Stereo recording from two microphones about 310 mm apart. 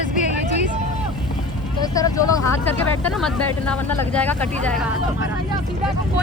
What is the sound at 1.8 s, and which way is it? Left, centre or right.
Speech, centre.